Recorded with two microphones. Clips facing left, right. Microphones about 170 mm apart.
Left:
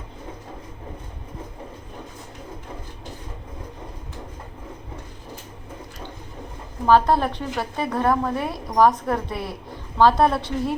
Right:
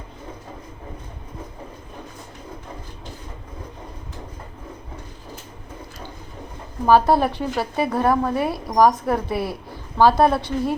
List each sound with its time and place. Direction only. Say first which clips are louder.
6.8 s a woman's voice: right 2 dB; 10° right (ahead or behind)